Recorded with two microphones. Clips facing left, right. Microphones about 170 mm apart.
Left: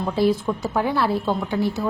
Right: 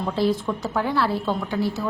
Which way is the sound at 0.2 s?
10° left (ahead or behind).